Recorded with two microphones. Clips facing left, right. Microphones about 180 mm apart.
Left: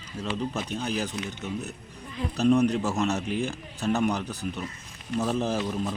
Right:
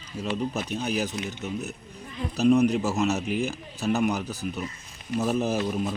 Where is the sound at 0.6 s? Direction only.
5° right (ahead or behind).